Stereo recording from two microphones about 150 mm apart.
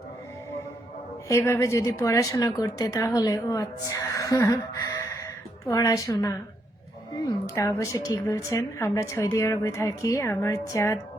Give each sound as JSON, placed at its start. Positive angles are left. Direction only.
{"t": 1.3, "sound": "speech", "side_deg": 20}